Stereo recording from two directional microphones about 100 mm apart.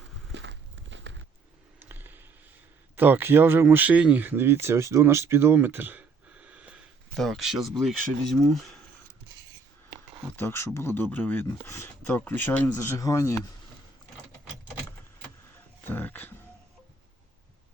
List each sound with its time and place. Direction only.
1.8 s a sound: 20° right (ahead or behind)
2.9 s speech: 20° right (ahead or behind)
7.1 s speech: centre (ahead or behind)
10.3 s speech: 25° left (ahead or behind)
12.0 s speech: 15° left (ahead or behind); by 13.3 s 30° left (ahead or behind)
15.8 s speech: 20° left (ahead or behind)